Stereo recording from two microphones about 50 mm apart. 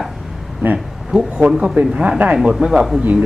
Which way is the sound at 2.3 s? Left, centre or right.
Centre.